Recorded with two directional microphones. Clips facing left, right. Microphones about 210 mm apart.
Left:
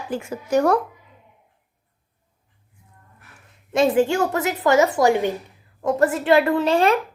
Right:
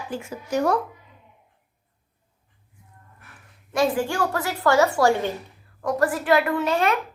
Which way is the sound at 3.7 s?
20° left (ahead or behind).